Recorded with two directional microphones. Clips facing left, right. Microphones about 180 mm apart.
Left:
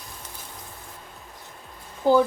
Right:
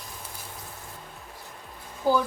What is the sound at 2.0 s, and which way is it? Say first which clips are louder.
Speech: left 5 dB; 20° left (ahead or behind).